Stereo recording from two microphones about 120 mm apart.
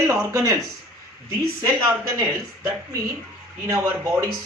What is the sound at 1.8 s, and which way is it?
Speech, 25° right (ahead or behind).